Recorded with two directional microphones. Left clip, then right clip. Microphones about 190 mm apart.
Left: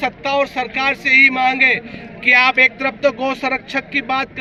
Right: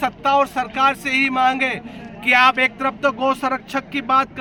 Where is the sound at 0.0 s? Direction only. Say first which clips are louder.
Right 1 dB; 15° right (ahead or behind).